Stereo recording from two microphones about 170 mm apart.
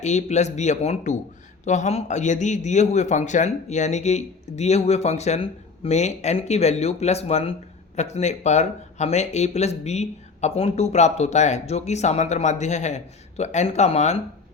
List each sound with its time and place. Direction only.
0.0 s a man's voice: 45° left (ahead or behind)